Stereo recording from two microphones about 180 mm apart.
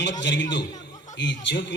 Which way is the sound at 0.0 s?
75° left (ahead or behind).